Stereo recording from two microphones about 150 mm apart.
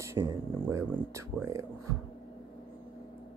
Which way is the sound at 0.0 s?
20° right (ahead or behind).